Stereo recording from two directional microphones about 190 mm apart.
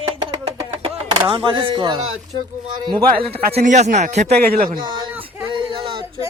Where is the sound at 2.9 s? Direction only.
30° right (ahead or behind).